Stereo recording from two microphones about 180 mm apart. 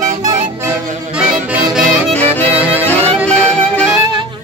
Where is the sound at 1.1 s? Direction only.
5° right (ahead or behind).